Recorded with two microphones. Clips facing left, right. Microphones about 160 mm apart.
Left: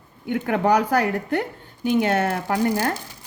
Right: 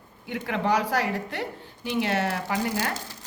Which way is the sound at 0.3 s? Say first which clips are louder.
Left 6 dB; 55° left (ahead or behind).